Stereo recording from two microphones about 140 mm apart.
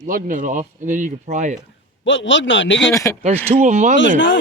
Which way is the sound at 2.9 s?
25° left (ahead or behind).